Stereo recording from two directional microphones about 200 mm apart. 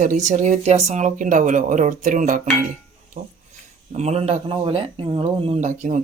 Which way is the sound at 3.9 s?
35° right (ahead or behind).